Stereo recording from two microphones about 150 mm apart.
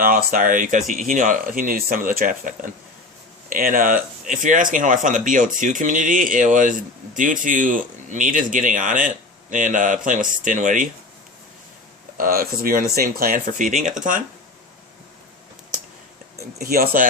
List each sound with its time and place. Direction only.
0.0 s speech: 70° right (ahead or behind)
12.1 s speech: 70° right (ahead or behind)
16.6 s speech: 85° right